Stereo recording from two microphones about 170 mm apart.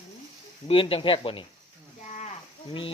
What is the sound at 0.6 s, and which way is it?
Speech, 30° left (ahead or behind).